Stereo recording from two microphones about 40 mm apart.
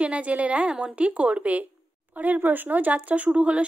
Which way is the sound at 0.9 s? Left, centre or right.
Right.